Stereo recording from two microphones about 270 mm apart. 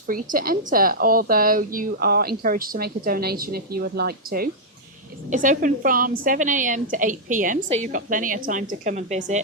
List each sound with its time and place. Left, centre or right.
0.1 s a woman's voice: right